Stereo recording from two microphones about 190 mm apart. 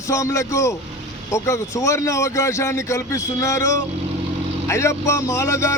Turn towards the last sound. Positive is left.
turn(degrees=15)  # may be behind; listen again after turning